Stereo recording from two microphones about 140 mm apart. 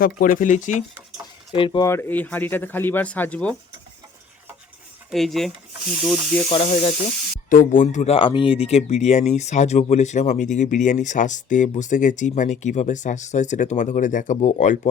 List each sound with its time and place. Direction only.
0.2 s speech: 75° left (ahead or behind)
1.5 s speech: 35° left (ahead or behind)
1.8 s speech: 20° left (ahead or behind)
5.1 s speech: centre (ahead or behind)
6.5 s speech: 45° left (ahead or behind)
7.5 s speech: 70° left (ahead or behind)
8.0 s speech: 40° left (ahead or behind); by 14.8 s 60° left (ahead or behind)